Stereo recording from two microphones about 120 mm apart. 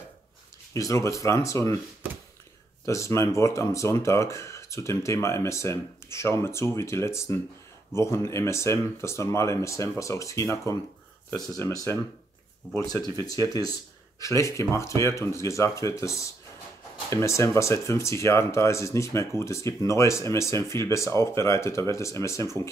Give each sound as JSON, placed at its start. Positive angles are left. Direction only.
{"t": 0.7, "sound": "speech", "side_deg": 25}
{"t": 2.8, "sound": "speech", "side_deg": 25}